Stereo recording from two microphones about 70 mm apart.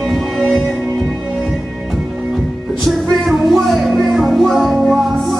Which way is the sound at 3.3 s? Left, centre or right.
Centre.